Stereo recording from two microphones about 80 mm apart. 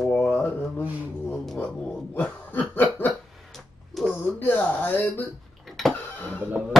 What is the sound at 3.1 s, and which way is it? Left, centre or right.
Dog, centre.